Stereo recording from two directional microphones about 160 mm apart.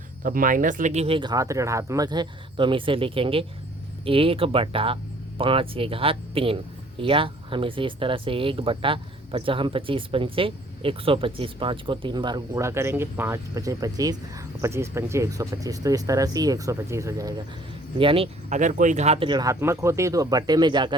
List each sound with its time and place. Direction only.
0.2 s speech: 60° right (ahead or behind); by 17.3 s 20° right (ahead or behind)
17.9 s speech: 35° right (ahead or behind)